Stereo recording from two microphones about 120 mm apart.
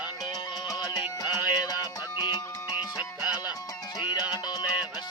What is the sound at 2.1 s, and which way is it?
Music, 35° left (ahead or behind).